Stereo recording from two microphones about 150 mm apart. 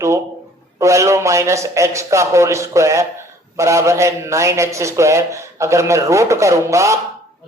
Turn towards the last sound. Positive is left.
turn(degrees=-20)  # may be behind; listen again after turning